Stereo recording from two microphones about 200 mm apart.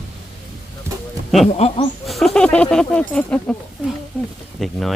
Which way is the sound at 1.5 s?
30° left (ahead or behind).